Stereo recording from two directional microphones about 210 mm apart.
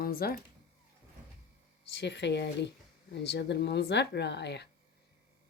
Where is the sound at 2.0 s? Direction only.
55° left (ahead or behind).